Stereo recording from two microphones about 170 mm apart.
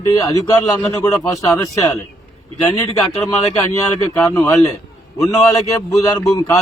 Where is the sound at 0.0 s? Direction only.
20° left (ahead or behind).